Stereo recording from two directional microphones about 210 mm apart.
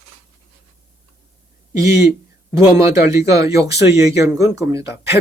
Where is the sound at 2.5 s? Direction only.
15° right (ahead or behind).